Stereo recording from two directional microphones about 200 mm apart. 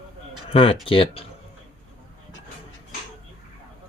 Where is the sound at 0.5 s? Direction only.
25° left (ahead or behind).